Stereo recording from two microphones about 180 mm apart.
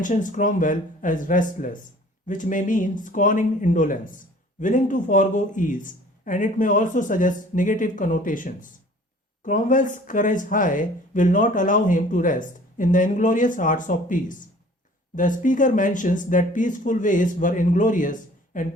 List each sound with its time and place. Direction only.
0.0 s speech: 45° left (ahead or behind)